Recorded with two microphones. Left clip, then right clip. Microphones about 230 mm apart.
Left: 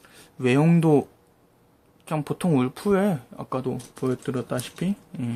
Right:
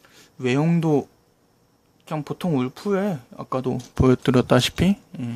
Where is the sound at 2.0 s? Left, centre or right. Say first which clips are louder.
Left 1 dB; centre.